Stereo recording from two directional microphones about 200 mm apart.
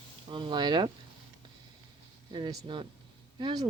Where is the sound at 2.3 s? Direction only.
25° right (ahead or behind).